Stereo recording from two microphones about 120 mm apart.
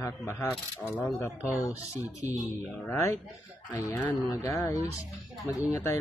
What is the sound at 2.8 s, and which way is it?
Speech, 20° left (ahead or behind).